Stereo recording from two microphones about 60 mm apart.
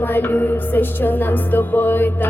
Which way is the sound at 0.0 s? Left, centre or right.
Left.